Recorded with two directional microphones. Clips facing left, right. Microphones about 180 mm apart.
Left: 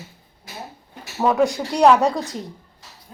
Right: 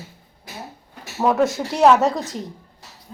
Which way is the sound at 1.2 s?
Centre (ahead or behind).